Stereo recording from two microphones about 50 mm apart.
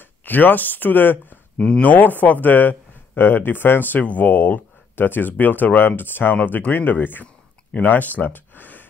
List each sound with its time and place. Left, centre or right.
0.2 s speech: left
6.3 s speech: left